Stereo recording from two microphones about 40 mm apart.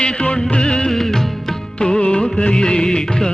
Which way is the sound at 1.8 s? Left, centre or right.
Left.